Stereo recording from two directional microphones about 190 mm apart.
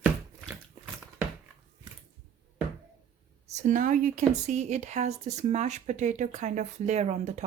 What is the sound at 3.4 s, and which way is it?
Speech, 40° right (ahead or behind).